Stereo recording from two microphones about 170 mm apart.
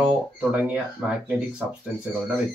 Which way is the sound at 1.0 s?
5° right (ahead or behind).